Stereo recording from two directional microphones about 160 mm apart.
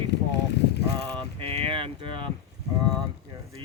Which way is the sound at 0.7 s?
90° left.